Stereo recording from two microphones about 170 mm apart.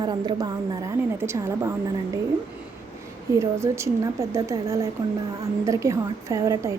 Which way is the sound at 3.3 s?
15° right (ahead or behind).